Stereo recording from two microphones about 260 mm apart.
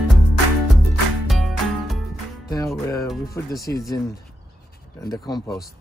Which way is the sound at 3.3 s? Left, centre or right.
Centre.